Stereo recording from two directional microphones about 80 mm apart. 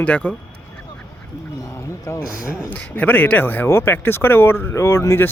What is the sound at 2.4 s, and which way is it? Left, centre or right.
Speech, centre.